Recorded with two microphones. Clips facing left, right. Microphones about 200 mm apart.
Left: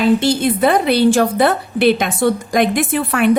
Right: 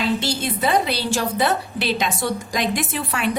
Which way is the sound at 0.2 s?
55° left (ahead or behind).